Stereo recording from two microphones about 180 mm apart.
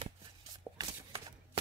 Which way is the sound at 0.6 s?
15° right (ahead or behind).